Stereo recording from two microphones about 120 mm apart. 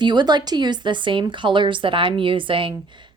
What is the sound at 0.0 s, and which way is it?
Speech, 35° right (ahead or behind).